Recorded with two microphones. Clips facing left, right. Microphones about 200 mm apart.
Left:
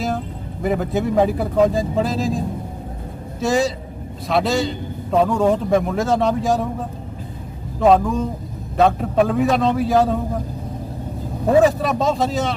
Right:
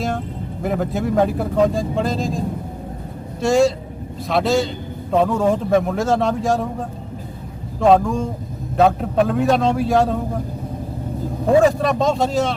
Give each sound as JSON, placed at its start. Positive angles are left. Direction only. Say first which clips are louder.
{"t": 0.6, "sound": "speech", "louder": "left 1 dB", "side_deg": 0}
{"t": 3.4, "sound": "speech", "louder": "right 3 dB", "side_deg": 0}
{"t": 7.8, "sound": "speech", "louder": "even", "side_deg": 0}
{"t": 11.6, "sound": "speech", "louder": "right 1 dB", "side_deg": 0}